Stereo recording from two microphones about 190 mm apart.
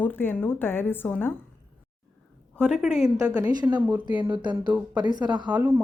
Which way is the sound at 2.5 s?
5° left (ahead or behind).